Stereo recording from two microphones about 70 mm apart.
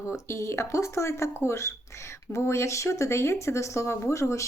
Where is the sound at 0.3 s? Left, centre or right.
Left.